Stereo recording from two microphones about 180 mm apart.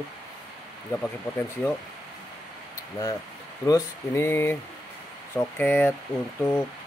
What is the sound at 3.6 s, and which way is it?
Speech, 15° left (ahead or behind).